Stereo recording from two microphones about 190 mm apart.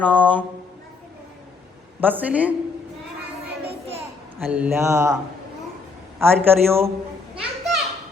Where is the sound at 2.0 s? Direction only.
10° right (ahead or behind).